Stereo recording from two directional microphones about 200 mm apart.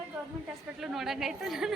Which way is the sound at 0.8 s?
Centre (ahead or behind).